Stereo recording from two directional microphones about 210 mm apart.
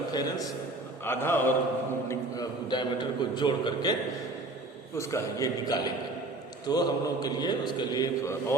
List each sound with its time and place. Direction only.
0.1 s a man's voice: 20° left (ahead or behind)
4.9 s a man's voice: 15° left (ahead or behind)